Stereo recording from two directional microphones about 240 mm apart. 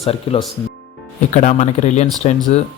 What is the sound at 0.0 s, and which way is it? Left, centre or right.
Speech, left.